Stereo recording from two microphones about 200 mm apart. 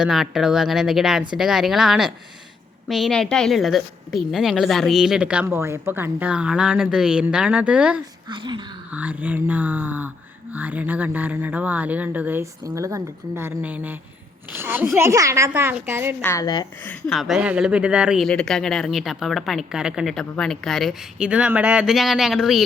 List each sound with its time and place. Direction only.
0.0 s speech: centre (ahead or behind)
8.3 s speech: 20° right (ahead or behind)
8.9 s speech: 10° right (ahead or behind)
16.2 s speech: 15° left (ahead or behind)
16.8 s speech: 5° left (ahead or behind)